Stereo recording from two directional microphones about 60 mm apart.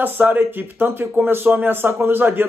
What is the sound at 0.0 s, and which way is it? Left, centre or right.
Speech, right.